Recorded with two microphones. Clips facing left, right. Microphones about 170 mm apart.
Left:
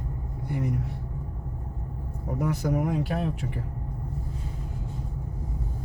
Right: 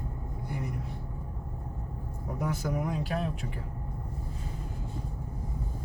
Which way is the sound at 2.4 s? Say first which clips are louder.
Left 5 dB; 60° left (ahead or behind).